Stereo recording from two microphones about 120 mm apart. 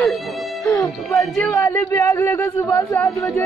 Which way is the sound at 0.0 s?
Centre (ahead or behind).